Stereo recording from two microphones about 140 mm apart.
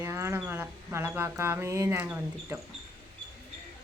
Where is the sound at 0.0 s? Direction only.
20° right (ahead or behind).